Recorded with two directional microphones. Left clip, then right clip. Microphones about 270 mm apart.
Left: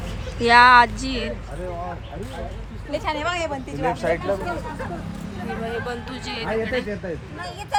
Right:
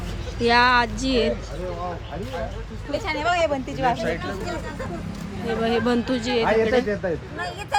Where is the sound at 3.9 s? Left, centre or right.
Left.